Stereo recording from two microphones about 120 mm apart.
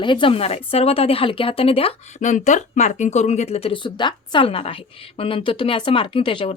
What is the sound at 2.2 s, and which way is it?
Speech, 90° left.